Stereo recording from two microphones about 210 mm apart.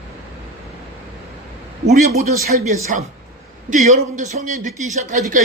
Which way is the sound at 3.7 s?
35° right (ahead or behind).